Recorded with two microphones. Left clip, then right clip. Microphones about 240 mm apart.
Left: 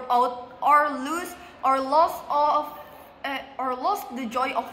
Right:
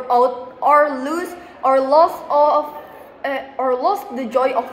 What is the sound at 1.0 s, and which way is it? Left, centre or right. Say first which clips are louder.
Speech: right 6 dB; centre.